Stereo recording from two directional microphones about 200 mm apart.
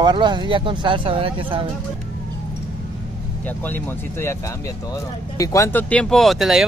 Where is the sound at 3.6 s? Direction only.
10° left (ahead or behind).